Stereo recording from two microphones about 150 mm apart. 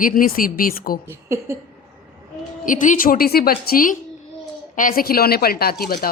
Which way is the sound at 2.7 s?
60° left (ahead or behind).